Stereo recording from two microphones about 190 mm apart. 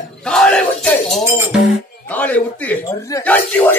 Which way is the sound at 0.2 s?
5° left (ahead or behind).